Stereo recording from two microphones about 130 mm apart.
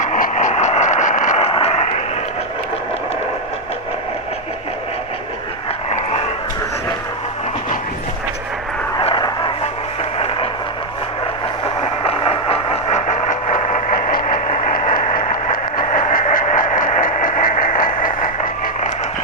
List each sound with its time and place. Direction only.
0.0 s vehicle: 70° left (ahead or behind)
1.5 s vehicle: 50° left (ahead or behind)
9.0 s vehicle: 35° left (ahead or behind)
11.6 s vehicle: 45° left (ahead or behind)
13.1 s vehicle: 70° left (ahead or behind); by 18.1 s 90° left